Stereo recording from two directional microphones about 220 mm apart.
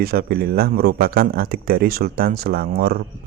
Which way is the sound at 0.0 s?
45° right (ahead or behind).